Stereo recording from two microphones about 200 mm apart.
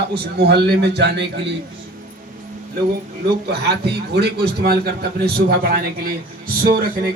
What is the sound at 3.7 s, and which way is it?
A man's voice, 55° right (ahead or behind).